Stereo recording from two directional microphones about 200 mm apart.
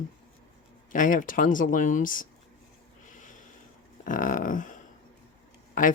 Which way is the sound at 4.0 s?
40° left (ahead or behind).